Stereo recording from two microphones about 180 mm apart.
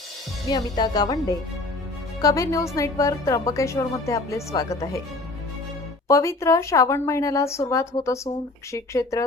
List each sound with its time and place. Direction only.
0.5 s speech: 25° left (ahead or behind)
2.2 s a woman's voice: 20° left (ahead or behind)
6.1 s a woman's voice: 15° left (ahead or behind)